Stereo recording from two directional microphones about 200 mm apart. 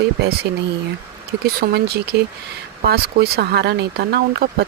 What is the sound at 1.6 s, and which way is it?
Speech, 50° right (ahead or behind).